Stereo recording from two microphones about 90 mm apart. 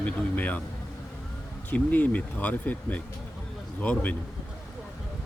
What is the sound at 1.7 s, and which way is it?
Speech, 15° left (ahead or behind).